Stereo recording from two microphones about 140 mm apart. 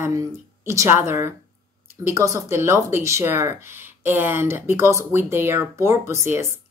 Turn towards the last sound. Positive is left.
turn(degrees=-20)  # may be behind; listen again after turning